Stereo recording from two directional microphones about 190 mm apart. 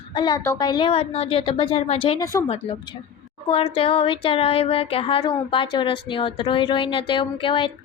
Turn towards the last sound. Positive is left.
turn(degrees=25)  # may be behind; listen again after turning